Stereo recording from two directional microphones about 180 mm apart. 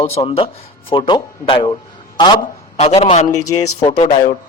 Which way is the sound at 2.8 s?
35° left (ahead or behind).